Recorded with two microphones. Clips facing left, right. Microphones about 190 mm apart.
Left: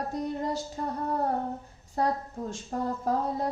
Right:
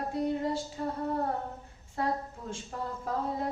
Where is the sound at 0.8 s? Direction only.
45° left (ahead or behind).